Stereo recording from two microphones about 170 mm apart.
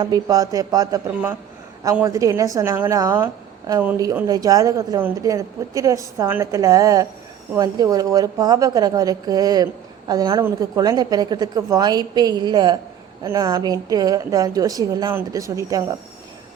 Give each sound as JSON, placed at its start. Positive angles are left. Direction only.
{"t": 0.0, "sound": "a woman's voice", "side_deg": -20}